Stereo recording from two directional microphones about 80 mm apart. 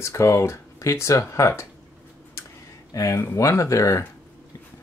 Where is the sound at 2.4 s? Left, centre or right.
Left.